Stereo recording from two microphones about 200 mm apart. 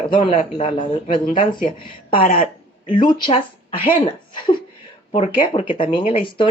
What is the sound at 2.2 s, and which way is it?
Speech, 45° left (ahead or behind).